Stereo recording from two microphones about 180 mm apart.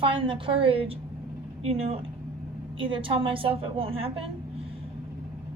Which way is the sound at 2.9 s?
30° right (ahead or behind).